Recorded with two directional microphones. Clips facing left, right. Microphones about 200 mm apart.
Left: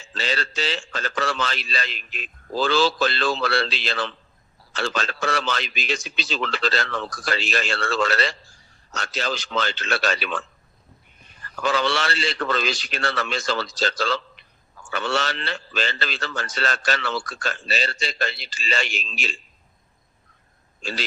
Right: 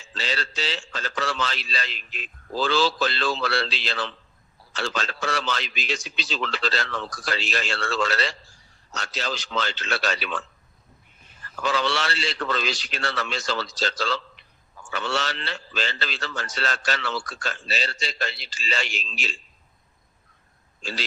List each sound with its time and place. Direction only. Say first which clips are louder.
0.1 s a man's voice: left 3 dB; 55° left (ahead or behind)
11.6 s a man's voice: left 2 dB; 55° left (ahead or behind)